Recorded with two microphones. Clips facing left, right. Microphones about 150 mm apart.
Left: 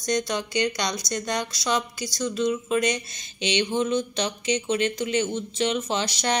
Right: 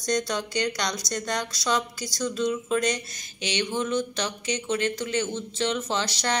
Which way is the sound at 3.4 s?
20° left (ahead or behind).